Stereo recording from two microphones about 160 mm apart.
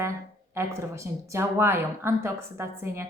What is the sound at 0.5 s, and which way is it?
A woman's voice, 20° right (ahead or behind).